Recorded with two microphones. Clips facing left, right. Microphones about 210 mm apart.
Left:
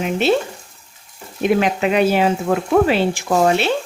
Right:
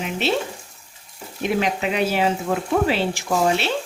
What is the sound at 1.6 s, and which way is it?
Speech, 55° left (ahead or behind).